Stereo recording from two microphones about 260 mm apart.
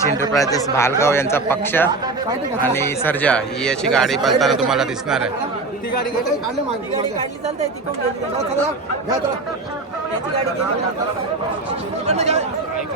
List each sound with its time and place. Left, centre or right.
0.3 s a man's voice: centre
12.0 s speech: right